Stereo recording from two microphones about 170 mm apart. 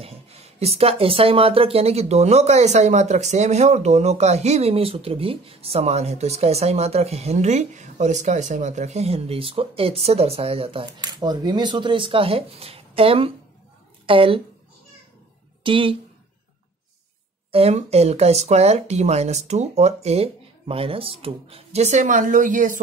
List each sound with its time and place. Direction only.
0.0 s speech: 35° right (ahead or behind)
15.6 s speech: 30° right (ahead or behind)
17.5 s speech: 35° right (ahead or behind)